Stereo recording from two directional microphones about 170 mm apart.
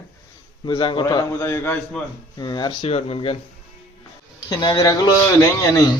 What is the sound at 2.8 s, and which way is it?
Speech, 35° left (ahead or behind).